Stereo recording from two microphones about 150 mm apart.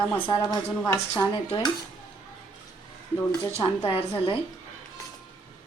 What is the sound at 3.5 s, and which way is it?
Speech, 40° left (ahead or behind).